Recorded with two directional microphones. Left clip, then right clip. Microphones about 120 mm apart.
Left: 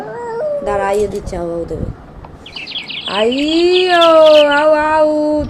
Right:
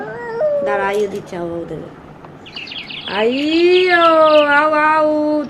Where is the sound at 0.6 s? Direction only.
45° left (ahead or behind).